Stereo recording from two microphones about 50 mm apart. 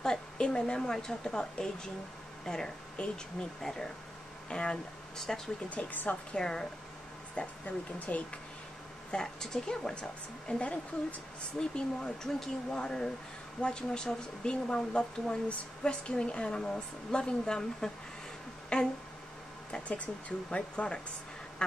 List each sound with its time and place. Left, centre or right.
0.0 s a woman's voice: centre
5.8 s a woman's voice: left
6.3 s speech: centre
7.6 s speech: left
9.1 s speech: centre
11.7 s speech: centre